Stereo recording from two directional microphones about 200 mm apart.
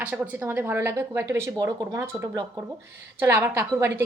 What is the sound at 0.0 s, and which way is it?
Speech, 10° right (ahead or behind).